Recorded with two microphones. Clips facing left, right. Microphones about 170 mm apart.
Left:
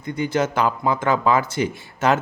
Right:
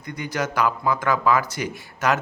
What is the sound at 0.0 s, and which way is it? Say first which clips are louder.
A man's voice: left 6 dB; 25° left (ahead or behind).